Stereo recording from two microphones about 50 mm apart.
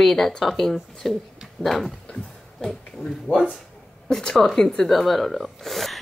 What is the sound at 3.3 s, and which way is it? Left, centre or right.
Speech, left.